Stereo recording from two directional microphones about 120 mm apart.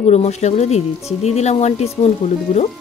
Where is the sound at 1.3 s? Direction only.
65° left (ahead or behind).